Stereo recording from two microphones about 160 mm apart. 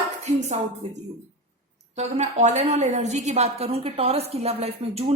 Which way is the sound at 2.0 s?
45° right (ahead or behind).